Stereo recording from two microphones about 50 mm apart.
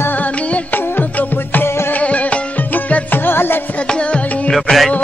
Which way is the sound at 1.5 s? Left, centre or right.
Left.